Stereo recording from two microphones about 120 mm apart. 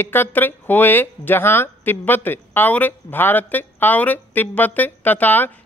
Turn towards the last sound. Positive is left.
turn(degrees=15)  # may be behind; listen again after turning